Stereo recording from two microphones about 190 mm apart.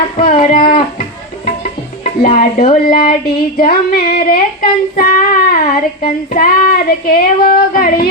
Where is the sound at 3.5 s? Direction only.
55° left (ahead or behind).